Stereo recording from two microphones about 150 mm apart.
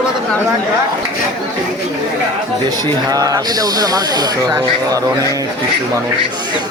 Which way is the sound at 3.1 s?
25° right (ahead or behind).